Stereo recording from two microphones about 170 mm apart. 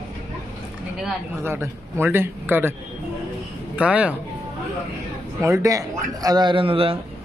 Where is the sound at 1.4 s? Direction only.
15° right (ahead or behind).